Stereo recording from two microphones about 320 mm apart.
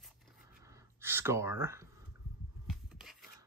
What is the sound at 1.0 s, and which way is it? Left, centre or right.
Speech, centre.